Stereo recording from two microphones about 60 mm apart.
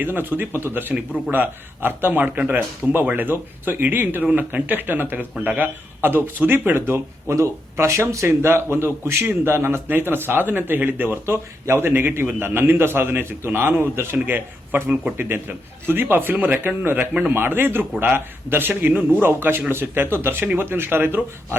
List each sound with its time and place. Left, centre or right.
0.0 s a man's voice: right
7.3 s a man's voice: right
11.6 s a man's voice: right
19.2 s a man's voice: right